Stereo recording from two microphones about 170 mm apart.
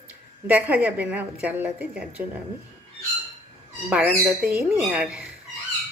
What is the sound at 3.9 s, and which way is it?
A woman's voice, 5° right (ahead or behind).